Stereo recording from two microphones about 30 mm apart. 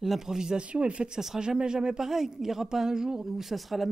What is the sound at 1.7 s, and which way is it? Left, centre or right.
Speech, centre.